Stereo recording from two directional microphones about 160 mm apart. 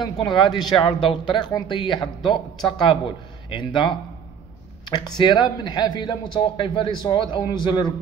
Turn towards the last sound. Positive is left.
turn(degrees=25)  # may be behind; listen again after turning